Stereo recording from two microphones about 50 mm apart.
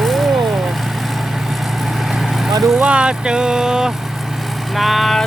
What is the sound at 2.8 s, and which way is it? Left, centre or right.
Speech, right.